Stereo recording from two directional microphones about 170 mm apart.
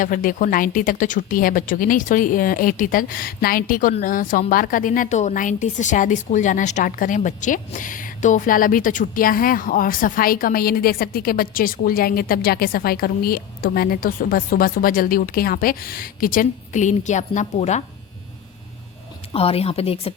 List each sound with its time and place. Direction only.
0.0 s a woman's voice: 50° left (ahead or behind)
19.3 s speech: 35° left (ahead or behind)